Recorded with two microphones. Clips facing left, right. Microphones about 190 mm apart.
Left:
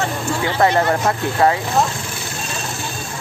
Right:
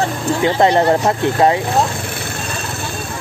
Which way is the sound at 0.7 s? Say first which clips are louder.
Right 4 dB; 30° right (ahead or behind).